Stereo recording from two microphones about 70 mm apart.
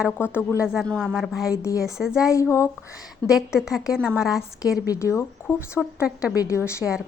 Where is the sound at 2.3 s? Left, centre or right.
Left.